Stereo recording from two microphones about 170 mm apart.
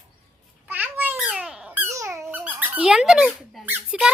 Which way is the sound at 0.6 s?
10° right (ahead or behind).